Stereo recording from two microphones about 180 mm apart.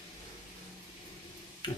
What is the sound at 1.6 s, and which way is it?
Tick-tock, 25° left (ahead or behind).